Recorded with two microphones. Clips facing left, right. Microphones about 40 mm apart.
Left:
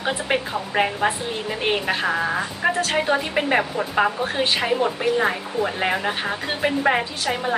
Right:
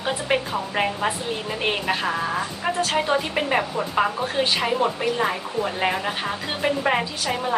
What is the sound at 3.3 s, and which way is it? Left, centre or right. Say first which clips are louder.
A woman's voice: left 2 dB; centre.